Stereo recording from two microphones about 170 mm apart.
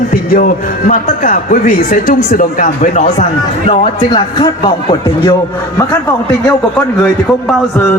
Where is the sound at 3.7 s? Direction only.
30° left (ahead or behind).